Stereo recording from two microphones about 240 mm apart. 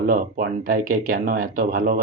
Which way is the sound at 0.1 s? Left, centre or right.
Right.